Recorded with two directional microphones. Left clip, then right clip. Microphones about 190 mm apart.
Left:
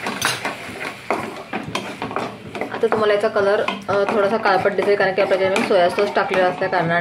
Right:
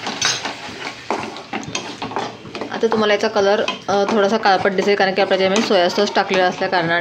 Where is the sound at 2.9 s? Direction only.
35° right (ahead or behind).